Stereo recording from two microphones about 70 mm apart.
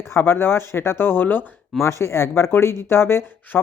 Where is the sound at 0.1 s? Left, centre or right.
Left.